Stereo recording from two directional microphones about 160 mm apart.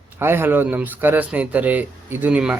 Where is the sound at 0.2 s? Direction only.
15° right (ahead or behind).